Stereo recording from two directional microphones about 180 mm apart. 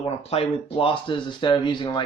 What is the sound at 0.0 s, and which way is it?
Speech, 35° left (ahead or behind).